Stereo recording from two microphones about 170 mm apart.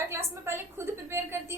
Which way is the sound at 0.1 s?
15° right (ahead or behind).